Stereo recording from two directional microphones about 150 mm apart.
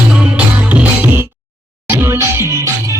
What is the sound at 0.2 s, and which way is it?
Music, 10° right (ahead or behind).